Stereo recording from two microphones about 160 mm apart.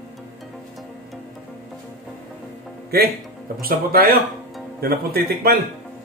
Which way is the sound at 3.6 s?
70° right (ahead or behind).